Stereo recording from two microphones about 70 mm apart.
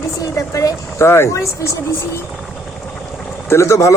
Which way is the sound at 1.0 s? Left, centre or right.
Left.